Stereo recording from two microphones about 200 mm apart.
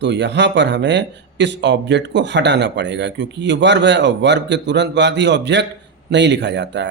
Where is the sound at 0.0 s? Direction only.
60° right (ahead or behind).